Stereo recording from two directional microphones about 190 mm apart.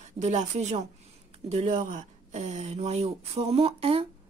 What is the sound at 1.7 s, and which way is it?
Speech, 45° right (ahead or behind).